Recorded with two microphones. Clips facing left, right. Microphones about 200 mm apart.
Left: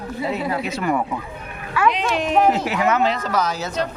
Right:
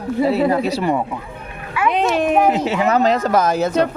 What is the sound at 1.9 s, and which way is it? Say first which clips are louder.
Speech: right 5 dB; 55° right (ahead or behind).